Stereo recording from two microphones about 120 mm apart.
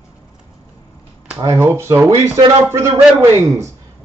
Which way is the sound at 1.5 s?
20° right (ahead or behind).